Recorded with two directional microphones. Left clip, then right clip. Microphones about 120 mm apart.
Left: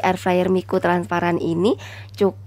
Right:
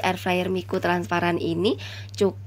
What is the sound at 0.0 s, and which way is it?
A woman's voice, 35° left (ahead or behind).